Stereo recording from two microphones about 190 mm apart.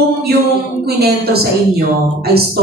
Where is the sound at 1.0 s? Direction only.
55° right (ahead or behind).